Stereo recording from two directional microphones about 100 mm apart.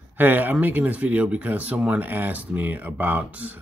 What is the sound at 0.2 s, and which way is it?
Speech, 20° right (ahead or behind).